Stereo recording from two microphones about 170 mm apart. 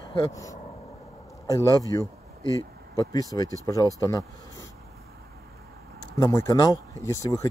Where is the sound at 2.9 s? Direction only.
20° left (ahead or behind).